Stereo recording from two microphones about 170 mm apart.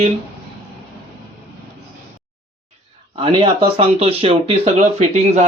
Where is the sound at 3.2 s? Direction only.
30° right (ahead or behind).